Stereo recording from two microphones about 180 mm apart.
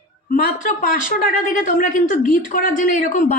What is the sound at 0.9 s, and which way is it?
A woman's voice, 50° left (ahead or behind).